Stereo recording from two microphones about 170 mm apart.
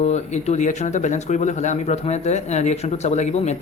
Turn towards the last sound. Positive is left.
turn(degrees=40)  # may be behind; listen again after turning